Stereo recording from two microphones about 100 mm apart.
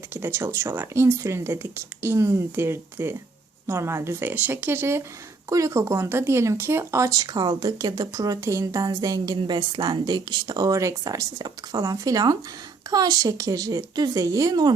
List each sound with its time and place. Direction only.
0.1 s speech: 25° right (ahead or behind); by 14.7 s 40° right (ahead or behind)